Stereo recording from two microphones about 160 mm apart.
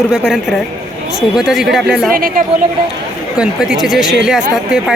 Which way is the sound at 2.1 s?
60° right (ahead or behind).